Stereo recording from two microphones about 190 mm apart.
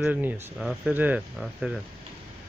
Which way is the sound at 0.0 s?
10° right (ahead or behind).